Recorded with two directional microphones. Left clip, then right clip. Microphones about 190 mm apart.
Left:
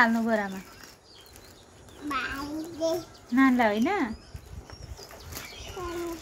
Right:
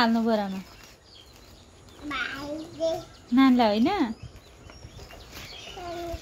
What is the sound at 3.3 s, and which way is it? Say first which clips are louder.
Speech: right 2 dB; 25° right (ahead or behind).